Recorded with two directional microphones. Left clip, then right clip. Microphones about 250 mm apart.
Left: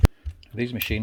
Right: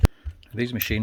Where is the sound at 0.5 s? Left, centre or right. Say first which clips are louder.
Right 1 dB; centre.